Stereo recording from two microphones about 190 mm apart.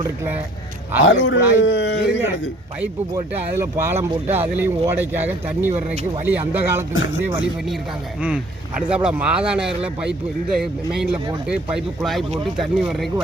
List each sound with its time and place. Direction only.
1.0 s speech: 80° left
3.6 s speech: 10° right (ahead or behind)
5.7 s speech: 35° right (ahead or behind)
6.2 s speech: 10° right (ahead or behind)
8.9 s speech: 5° right (ahead or behind)